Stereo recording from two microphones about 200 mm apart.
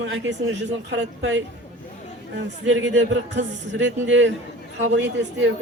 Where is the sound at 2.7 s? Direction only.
65° right (ahead or behind).